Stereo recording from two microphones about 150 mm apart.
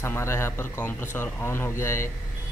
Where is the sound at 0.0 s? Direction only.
15° left (ahead or behind).